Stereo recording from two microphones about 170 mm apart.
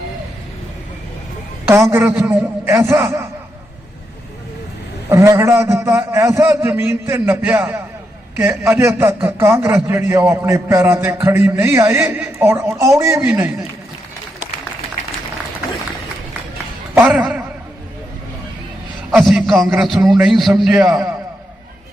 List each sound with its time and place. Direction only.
1.6 s a man's voice: 15° right (ahead or behind)
5.0 s a man's voice: 15° right (ahead or behind)
16.9 s a man's voice: 10° right (ahead or behind)
19.2 s a sound: 5° right (ahead or behind)
20.1 s a man's voice: centre (ahead or behind)